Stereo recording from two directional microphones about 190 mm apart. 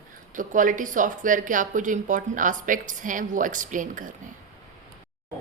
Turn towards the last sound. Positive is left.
turn(degrees=-45)  # may be behind; listen again after turning